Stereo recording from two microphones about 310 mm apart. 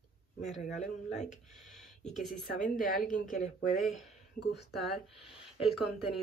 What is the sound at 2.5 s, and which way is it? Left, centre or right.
Speech, left.